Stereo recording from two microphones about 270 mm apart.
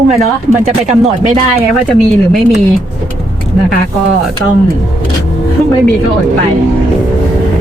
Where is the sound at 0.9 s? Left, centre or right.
Right.